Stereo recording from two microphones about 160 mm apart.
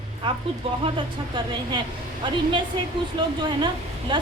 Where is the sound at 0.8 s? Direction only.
30° right (ahead or behind).